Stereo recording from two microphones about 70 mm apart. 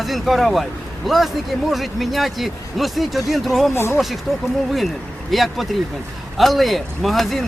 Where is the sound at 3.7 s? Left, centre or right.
Left.